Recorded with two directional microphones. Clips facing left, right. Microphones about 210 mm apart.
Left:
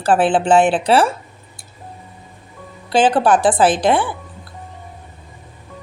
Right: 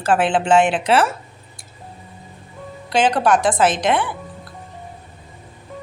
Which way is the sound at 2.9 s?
30° left (ahead or behind).